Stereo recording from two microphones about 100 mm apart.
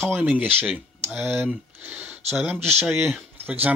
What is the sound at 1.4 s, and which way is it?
Speech, 15° right (ahead or behind).